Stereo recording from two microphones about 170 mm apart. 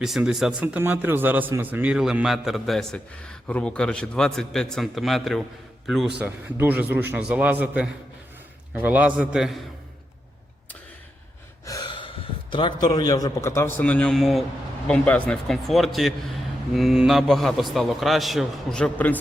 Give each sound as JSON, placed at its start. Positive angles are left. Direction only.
{"t": 0.0, "sound": "a man's voice", "side_deg": -5}
{"t": 11.6, "sound": "gasp", "side_deg": 20}
{"t": 11.9, "sound": "a man's voice", "side_deg": 30}